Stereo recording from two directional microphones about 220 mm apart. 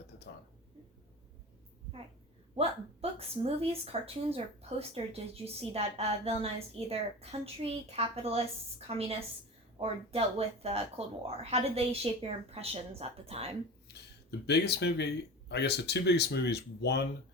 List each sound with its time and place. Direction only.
2.6 s a woman's voice: 25° right (ahead or behind)
13.8 s speech: 50° left (ahead or behind)